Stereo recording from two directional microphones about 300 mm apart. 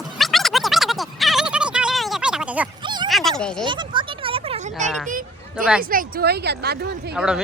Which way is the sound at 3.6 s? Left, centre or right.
Centre.